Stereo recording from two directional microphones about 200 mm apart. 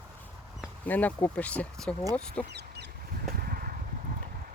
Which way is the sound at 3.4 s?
45° right (ahead or behind).